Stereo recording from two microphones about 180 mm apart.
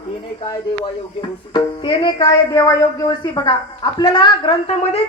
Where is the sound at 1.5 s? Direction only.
25° left (ahead or behind).